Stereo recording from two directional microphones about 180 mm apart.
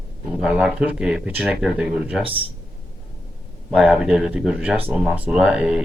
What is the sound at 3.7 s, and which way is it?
Speech, 5° right (ahead or behind).